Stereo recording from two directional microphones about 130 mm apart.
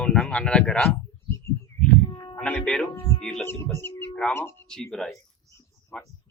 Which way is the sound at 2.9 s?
25° left (ahead or behind).